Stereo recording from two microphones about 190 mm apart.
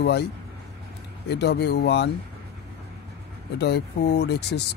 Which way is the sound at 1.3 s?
60° left (ahead or behind).